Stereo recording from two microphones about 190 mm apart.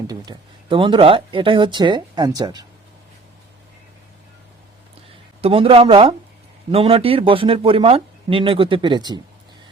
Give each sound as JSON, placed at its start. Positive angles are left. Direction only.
{"t": 0.1, "sound": "speech", "side_deg": -25}
{"t": 5.4, "sound": "speech", "side_deg": -30}